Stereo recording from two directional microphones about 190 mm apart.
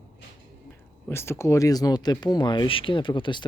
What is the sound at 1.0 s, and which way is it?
Speech, 15° left (ahead or behind).